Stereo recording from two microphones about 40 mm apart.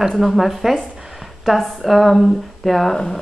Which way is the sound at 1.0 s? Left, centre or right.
Centre.